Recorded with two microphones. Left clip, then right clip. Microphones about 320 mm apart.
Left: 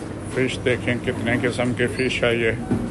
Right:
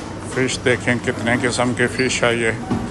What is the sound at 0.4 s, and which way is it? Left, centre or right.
Speech, centre.